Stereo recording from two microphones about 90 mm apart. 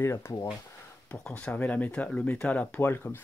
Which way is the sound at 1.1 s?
10° left (ahead or behind).